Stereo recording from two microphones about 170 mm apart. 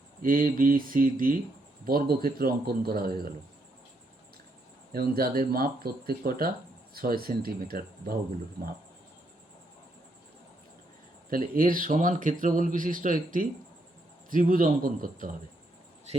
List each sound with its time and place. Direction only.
0.2 s speech: 55° right (ahead or behind)
4.9 s speech: 60° right (ahead or behind)
11.3 s speech: 55° right (ahead or behind)
16.1 s speech: 40° right (ahead or behind)